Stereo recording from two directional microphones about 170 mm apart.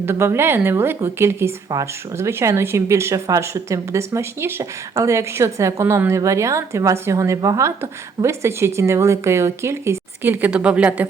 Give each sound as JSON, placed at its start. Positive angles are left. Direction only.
{"t": 0.0, "sound": "a woman's voice", "side_deg": -15}